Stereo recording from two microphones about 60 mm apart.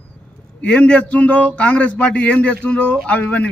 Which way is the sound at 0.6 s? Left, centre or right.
Centre.